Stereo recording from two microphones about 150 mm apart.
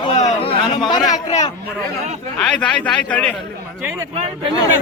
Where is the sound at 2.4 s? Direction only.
5° left (ahead or behind).